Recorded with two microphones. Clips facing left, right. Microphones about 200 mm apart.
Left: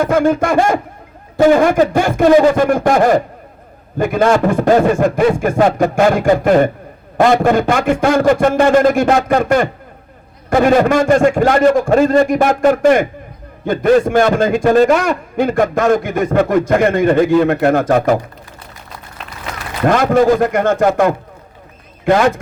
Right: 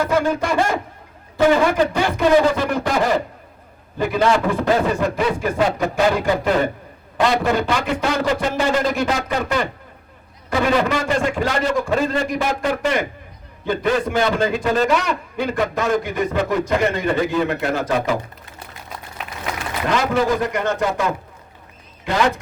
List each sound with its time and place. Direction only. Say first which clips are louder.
0.0 s a man's voice: left 6 dB; 50° left (ahead or behind)
19.8 s a man's voice: left 8 dB; 50° left (ahead or behind)